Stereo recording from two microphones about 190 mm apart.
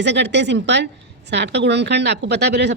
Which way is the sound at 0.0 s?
65° right (ahead or behind).